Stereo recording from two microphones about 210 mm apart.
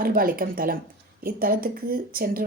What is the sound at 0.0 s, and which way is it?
Speech, 45° right (ahead or behind).